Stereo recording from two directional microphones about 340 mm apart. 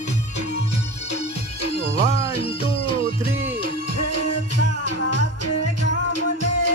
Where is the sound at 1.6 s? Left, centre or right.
Left.